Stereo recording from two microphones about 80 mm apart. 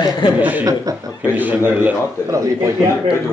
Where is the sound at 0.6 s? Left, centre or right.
Right.